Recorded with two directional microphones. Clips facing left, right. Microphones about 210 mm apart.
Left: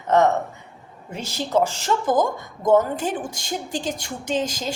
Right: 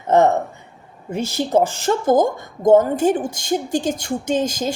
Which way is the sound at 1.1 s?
50° right (ahead or behind).